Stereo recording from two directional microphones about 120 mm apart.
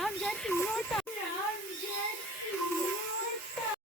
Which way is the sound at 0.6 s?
5° left (ahead or behind).